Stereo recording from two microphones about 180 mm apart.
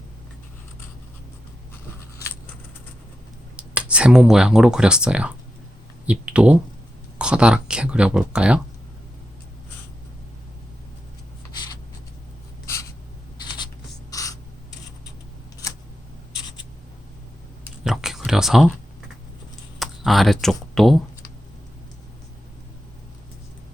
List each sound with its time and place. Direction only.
3.6 s speech: 5° right (ahead or behind)
12.6 s writing: 15° left (ahead or behind)
14.1 s spray: 20° left (ahead or behind)
17.8 s a sound: centre (ahead or behind)
19.8 s speech: centre (ahead or behind)